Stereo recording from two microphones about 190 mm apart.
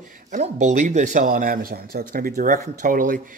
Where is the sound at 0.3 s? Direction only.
40° right (ahead or behind).